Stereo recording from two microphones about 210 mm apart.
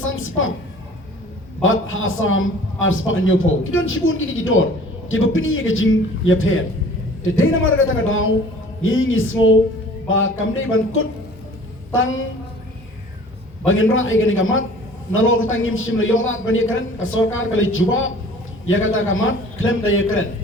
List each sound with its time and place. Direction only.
0.0 s a woman's voice: 75° left (ahead or behind)
1.6 s a man's voice: 70° left (ahead or behind)
13.7 s a man's voice: 70° left (ahead or behind)